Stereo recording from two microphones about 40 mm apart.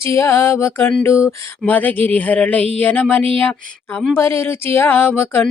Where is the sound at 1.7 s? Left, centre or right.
Left.